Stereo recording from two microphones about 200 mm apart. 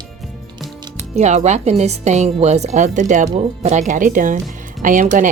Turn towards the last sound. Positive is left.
turn(degrees=-40)  # may be behind; listen again after turning